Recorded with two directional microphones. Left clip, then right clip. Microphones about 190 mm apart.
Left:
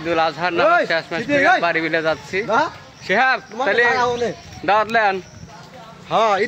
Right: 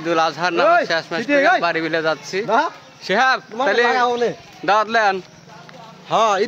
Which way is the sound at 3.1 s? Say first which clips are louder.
Even; 10° right (ahead or behind).